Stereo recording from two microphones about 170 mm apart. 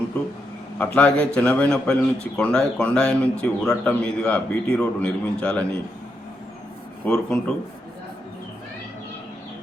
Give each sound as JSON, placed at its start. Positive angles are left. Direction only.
{"t": 0.8, "sound": "a man's voice", "side_deg": 10}
{"t": 7.0, "sound": "a man's voice", "side_deg": 10}